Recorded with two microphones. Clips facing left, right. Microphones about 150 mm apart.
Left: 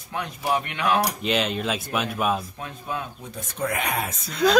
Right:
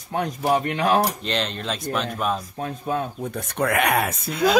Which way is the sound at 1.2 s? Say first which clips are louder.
Left 2 dB; 5° left (ahead or behind).